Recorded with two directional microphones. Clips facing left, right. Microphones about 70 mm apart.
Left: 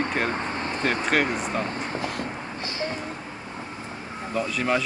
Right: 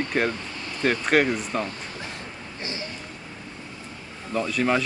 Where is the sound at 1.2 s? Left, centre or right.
Left.